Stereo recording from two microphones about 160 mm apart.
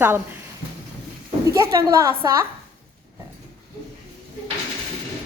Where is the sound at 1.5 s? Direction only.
20° right (ahead or behind).